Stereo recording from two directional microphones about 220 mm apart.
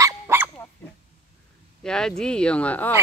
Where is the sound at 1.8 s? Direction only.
5° left (ahead or behind).